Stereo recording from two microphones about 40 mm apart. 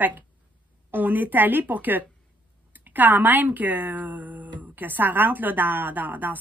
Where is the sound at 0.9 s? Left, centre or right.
Right.